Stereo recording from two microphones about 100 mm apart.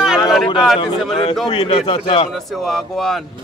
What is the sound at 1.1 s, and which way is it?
A man's voice, 70° left (ahead or behind).